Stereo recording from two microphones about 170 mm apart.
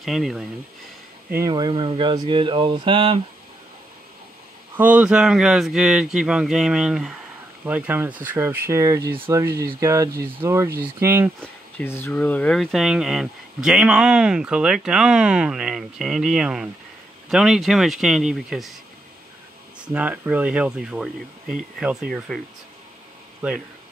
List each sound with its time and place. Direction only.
0.0 s speech: centre (ahead or behind)
1.5 s speech: 25° right (ahead or behind)
4.7 s speech: 10° right (ahead or behind)
11.8 s speech: 15° left (ahead or behind)
19.9 s speech: 10° right (ahead or behind)